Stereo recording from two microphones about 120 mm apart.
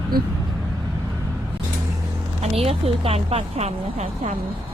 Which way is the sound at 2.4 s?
55° right (ahead or behind).